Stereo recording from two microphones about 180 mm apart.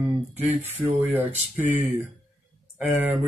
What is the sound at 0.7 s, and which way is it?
Speech, 10° right (ahead or behind).